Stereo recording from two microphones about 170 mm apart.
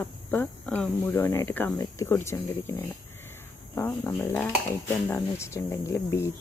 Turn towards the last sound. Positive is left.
turn(degrees=15)  # may be behind; listen again after turning